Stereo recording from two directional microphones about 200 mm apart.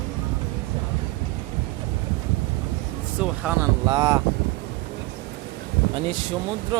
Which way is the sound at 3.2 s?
5° right (ahead or behind).